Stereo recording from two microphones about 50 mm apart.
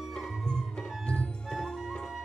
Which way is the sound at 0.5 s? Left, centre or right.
Centre.